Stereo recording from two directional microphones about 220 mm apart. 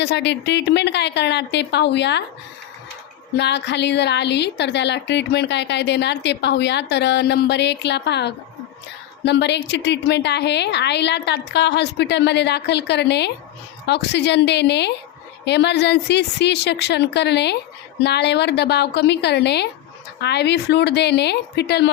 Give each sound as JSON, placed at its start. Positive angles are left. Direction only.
{"t": 0.0, "sound": "a woman's voice", "side_deg": 50}
{"t": 3.3, "sound": "a woman's voice", "side_deg": 50}